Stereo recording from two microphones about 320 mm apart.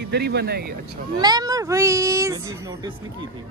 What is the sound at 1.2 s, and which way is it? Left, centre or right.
Speech, centre.